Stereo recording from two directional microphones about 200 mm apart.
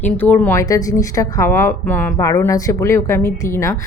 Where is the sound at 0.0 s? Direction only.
10° left (ahead or behind).